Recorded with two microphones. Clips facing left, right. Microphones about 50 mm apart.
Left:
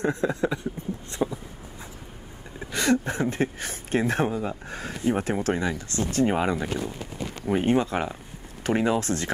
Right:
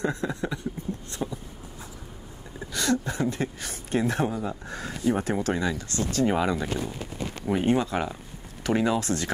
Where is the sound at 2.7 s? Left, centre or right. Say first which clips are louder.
Left 3 dB; left.